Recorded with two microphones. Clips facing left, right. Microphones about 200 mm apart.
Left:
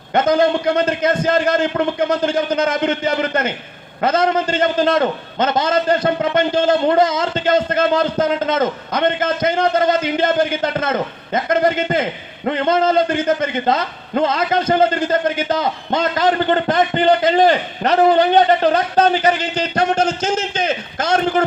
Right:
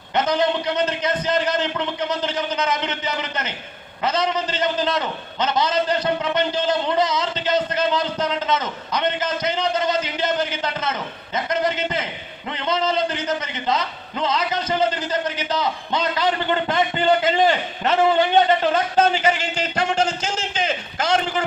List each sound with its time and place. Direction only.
0.1 s a man's voice: 50° left (ahead or behind)